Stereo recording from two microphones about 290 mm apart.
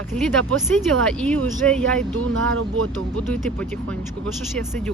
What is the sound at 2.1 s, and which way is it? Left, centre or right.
Speech, right.